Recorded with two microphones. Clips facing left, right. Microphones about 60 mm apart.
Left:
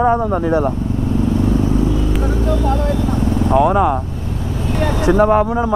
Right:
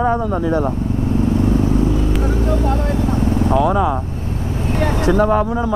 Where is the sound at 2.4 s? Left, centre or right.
Right.